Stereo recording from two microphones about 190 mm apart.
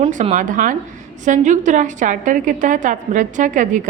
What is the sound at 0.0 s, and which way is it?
A woman's voice, 40° right (ahead or behind).